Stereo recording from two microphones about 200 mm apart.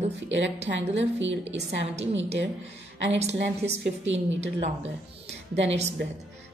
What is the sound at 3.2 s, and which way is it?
Speech, 60° right (ahead or behind).